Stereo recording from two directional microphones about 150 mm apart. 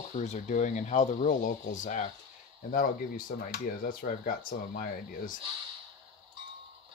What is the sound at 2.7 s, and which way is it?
Speech, 65° left (ahead or behind).